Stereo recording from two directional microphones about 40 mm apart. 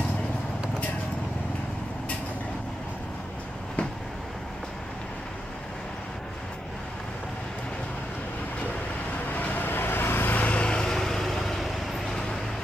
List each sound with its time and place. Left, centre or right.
9.3 s vehicle: left
10.3 s vehicle: left
10.6 s vehicle: left
10.9 s vehicle: centre